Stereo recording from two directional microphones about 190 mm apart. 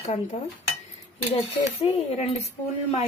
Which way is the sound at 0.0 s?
40° left (ahead or behind).